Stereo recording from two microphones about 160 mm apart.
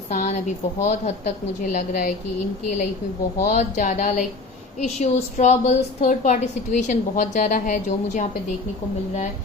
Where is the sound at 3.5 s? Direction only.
50° left (ahead or behind).